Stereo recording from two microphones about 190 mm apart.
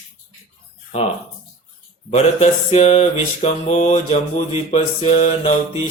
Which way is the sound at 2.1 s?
35° left (ahead or behind).